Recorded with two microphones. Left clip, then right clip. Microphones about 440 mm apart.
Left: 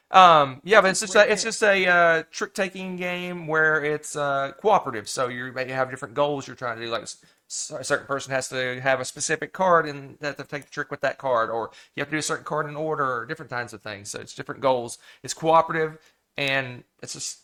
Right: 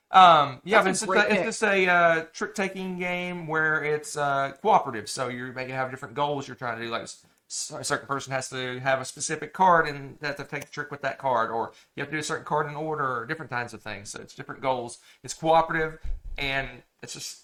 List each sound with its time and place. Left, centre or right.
0.1 s speech: left
14.3 s speech: left